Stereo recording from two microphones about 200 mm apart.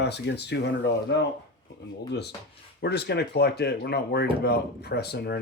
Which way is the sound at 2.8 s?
55° left (ahead or behind).